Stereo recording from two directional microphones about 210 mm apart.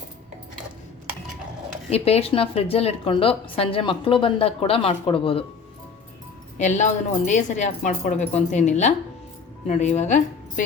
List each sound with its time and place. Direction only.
1.9 s a woman's voice: 30° left (ahead or behind)
6.6 s speech: 35° left (ahead or behind)